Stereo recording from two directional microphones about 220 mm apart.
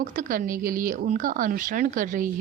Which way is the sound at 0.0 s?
35° right (ahead or behind).